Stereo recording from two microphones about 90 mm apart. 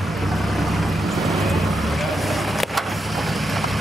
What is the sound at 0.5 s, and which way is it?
Vehicle, centre (ahead or behind).